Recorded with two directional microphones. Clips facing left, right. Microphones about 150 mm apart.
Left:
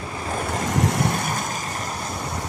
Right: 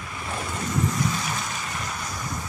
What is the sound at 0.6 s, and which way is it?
Vehicle, 80° left.